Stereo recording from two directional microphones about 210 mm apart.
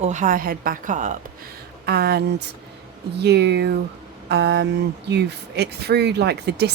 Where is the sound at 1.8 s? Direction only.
50° right (ahead or behind).